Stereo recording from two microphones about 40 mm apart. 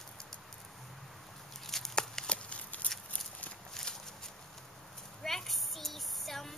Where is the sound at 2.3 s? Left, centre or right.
Left.